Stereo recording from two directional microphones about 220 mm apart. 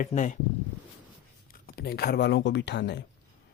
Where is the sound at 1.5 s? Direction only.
45° left (ahead or behind).